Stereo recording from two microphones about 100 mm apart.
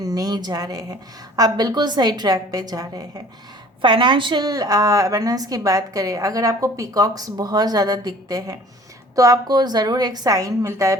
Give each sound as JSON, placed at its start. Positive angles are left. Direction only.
{"t": 0.0, "sound": "a woman's voice", "side_deg": -40}
{"t": 3.8, "sound": "a woman's voice", "side_deg": -55}
{"t": 4.4, "sound": "a woman's voice", "side_deg": -35}